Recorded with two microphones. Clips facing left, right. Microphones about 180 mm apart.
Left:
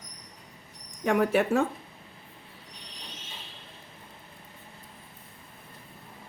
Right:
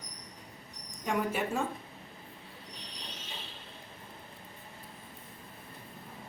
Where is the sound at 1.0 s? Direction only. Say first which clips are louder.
Left 8 dB; 70° left (ahead or behind).